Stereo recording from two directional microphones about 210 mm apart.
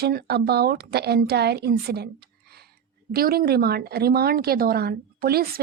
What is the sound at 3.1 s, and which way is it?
Speech, 45° right (ahead or behind).